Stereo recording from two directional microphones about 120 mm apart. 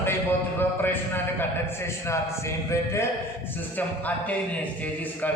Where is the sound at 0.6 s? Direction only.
20° left (ahead or behind).